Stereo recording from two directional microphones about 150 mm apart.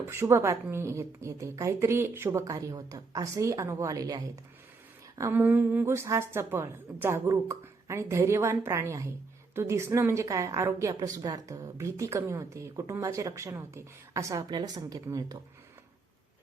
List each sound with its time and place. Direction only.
0.1 s a woman's voice: 15° right (ahead or behind)